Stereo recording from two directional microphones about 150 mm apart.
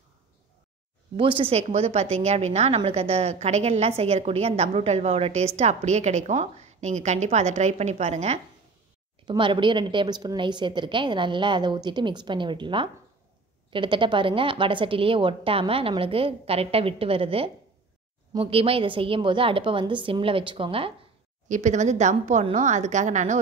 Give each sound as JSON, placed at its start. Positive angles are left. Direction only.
{"t": 1.1, "sound": "a woman's voice", "side_deg": -35}
{"t": 9.3, "sound": "a woman's voice", "side_deg": -35}
{"t": 21.5, "sound": "a woman's voice", "side_deg": -55}